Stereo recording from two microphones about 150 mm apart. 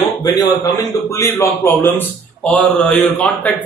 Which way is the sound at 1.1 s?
20° left (ahead or behind).